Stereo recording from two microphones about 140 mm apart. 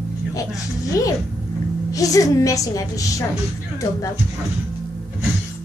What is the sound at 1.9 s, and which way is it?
A woman's voice, 25° left (ahead or behind).